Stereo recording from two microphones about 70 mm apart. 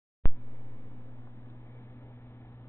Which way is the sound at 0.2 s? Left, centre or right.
Left.